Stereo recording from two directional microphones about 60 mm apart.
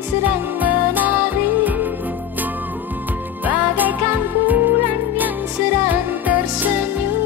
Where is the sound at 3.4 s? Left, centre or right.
Right.